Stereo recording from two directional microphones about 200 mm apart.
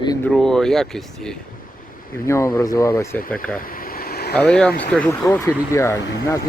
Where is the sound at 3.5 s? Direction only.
45° left (ahead or behind).